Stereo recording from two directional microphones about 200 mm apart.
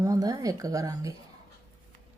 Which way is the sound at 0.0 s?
15° right (ahead or behind).